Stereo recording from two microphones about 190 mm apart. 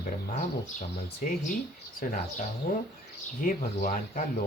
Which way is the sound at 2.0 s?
45° left (ahead or behind).